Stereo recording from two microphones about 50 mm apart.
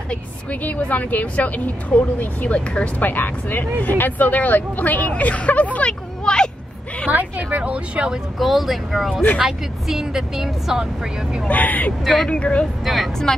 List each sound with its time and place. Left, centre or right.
0.1 s a woman's voice: left
3.0 s a woman's voice: left; by 6.5 s centre
7.1 s speech: right
8.4 s speech: centre
11.4 s a woman's voice: left
12.3 s speech: left
12.8 s speech: centre